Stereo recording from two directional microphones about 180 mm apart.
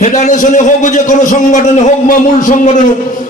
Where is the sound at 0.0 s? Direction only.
45° left (ahead or behind).